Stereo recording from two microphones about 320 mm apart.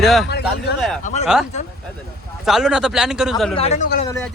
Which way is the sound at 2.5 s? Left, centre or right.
Centre.